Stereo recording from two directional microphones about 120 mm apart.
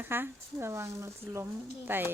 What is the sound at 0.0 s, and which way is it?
Speech, 20° right (ahead or behind).